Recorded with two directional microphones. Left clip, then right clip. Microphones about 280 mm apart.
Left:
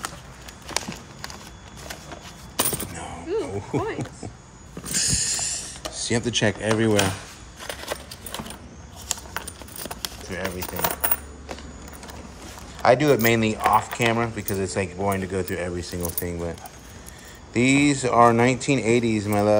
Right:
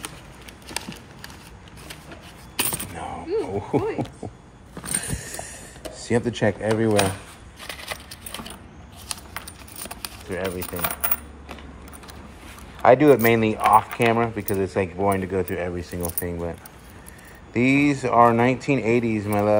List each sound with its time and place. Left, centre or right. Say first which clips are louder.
2.9 s a sound: right 1 dB; centre
10.6 s coin: left 2 dB; centre
12.8 s speech: right 3 dB; centre